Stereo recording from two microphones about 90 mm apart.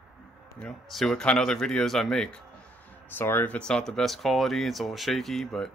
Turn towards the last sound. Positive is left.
turn(degrees=5)  # may be behind; listen again after turning